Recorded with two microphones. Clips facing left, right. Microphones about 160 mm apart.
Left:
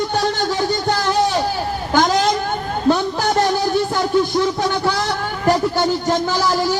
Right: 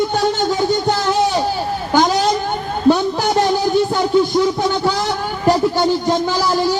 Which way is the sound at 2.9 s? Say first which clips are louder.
Right 1 dB; 15° right (ahead or behind).